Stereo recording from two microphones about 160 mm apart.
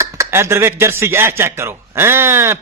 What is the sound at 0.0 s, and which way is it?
Speech, 15° right (ahead or behind).